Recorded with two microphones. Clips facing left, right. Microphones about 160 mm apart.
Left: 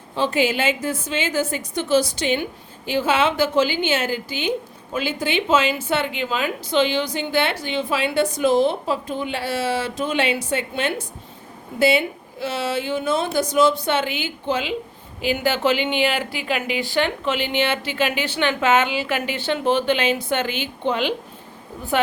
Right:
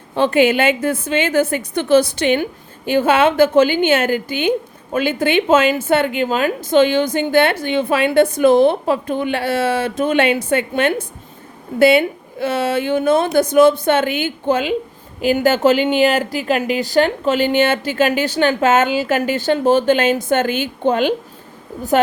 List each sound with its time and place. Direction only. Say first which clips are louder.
0.2 s a woman's voice: right 7 dB; 60° right (ahead or behind)